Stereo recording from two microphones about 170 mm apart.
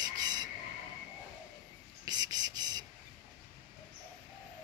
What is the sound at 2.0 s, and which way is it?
Cricket, 25° right (ahead or behind).